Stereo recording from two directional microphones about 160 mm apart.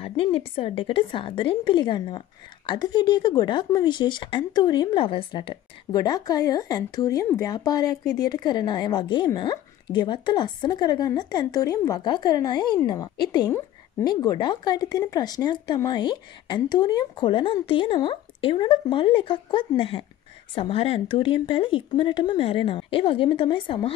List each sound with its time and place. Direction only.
0.0 s a woman's voice: 35° left (ahead or behind)